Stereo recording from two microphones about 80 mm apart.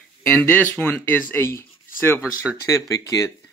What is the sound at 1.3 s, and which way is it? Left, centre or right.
Speech, left.